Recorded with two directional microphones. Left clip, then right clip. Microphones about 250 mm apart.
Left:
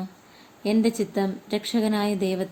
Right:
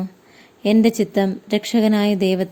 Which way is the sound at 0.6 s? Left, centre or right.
Right.